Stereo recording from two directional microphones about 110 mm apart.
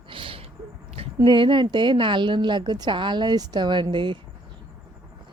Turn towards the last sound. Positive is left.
turn(degrees=-45)  # may be behind; listen again after turning